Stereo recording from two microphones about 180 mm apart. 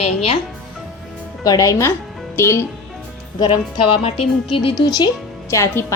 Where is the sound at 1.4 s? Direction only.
20° left (ahead or behind).